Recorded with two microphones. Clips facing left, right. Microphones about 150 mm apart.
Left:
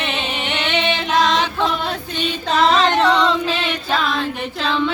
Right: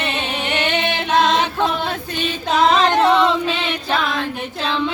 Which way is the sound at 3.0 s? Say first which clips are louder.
Right 2 dB; 25° right (ahead or behind).